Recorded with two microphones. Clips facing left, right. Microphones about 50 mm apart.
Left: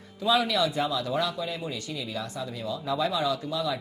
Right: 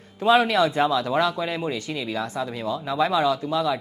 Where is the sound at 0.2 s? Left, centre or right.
Right.